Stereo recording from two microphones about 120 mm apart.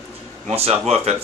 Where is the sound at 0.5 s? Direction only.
60° right (ahead or behind).